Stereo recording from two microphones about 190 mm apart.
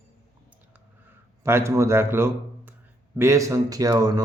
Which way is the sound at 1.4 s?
15° right (ahead or behind).